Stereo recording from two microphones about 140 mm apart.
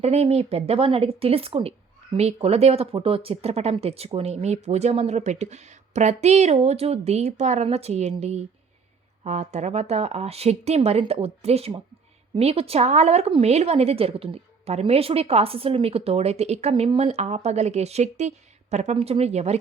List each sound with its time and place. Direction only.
0.0 s speech: 50° right (ahead or behind)